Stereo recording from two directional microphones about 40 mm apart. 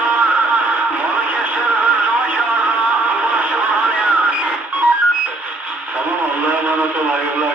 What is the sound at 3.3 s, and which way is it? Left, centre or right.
Music, right.